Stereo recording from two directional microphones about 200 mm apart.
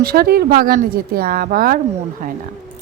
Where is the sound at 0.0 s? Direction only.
50° right (ahead or behind).